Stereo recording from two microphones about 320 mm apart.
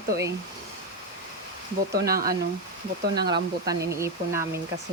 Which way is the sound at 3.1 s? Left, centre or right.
Centre.